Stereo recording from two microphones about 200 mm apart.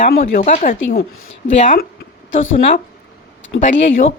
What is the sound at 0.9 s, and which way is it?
Speech, 55° left (ahead or behind).